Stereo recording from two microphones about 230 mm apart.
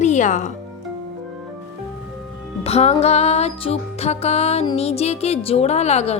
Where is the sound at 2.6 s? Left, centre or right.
Left.